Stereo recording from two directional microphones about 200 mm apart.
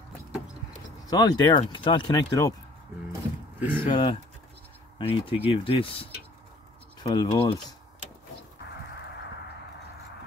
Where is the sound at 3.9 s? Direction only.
25° left (ahead or behind).